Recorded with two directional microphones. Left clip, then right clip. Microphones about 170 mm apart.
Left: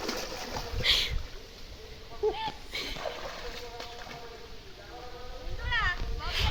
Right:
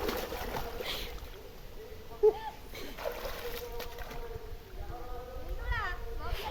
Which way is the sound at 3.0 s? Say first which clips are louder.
Left 1 dB; 25° right (ahead or behind).